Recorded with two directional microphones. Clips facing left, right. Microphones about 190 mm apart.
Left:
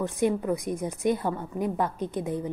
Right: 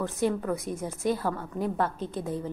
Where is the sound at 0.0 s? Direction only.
15° left (ahead or behind).